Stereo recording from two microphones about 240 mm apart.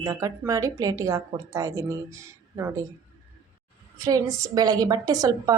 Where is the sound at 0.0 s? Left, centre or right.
Centre.